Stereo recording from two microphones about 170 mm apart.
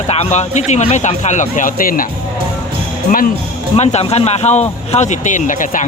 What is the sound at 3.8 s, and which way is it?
Speech, 40° left (ahead or behind).